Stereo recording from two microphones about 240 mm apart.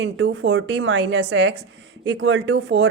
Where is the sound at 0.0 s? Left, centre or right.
Right.